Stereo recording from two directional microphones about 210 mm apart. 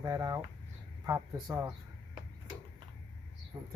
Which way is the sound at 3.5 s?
15° right (ahead or behind).